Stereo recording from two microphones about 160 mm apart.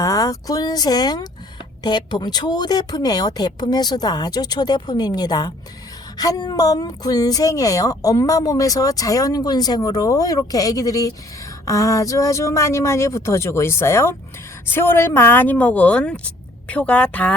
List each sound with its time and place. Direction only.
0.0 s a woman's voice: 20° left (ahead or behind)